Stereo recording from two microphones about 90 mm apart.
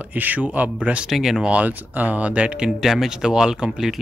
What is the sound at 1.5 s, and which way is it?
Speech, 15° right (ahead or behind).